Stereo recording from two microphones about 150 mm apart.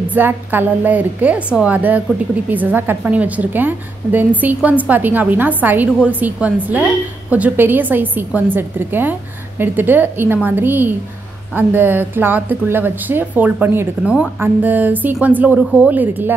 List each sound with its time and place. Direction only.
0.1 s a woman's voice: 10° right (ahead or behind)